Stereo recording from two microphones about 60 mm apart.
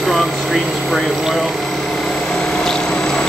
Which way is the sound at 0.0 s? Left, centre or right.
Centre.